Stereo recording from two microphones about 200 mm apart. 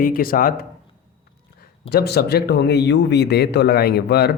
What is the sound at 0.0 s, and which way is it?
Speech, 45° left (ahead or behind).